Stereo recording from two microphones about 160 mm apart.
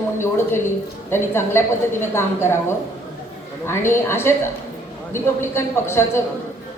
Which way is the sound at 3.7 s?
15° left (ahead or behind).